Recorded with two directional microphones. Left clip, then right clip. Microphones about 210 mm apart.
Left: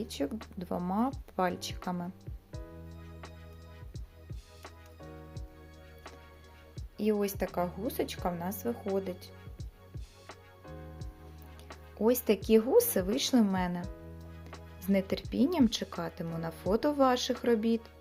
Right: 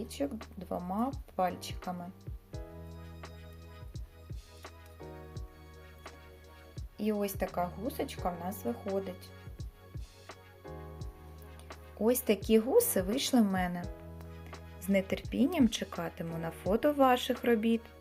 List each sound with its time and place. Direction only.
0.0 s speech: 20° left (ahead or behind)
3.9 s music: centre (ahead or behind)
6.9 s speech: 20° left (ahead or behind)
9.6 s music: centre (ahead or behind)
11.7 s speech: 10° left (ahead or behind)